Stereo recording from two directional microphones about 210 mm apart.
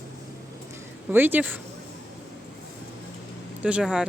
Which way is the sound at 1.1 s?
10° right (ahead or behind).